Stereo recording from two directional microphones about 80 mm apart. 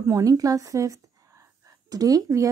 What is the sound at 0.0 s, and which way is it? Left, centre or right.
A woman's voice, right.